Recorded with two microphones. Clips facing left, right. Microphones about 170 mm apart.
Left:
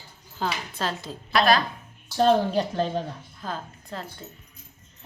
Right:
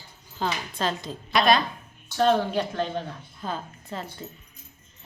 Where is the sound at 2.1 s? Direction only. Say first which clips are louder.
Left 2 dB; 35° left (ahead or behind).